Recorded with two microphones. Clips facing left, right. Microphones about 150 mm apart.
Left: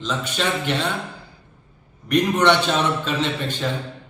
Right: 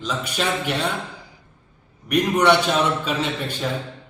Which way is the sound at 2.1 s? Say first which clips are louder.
Even; 10° right (ahead or behind).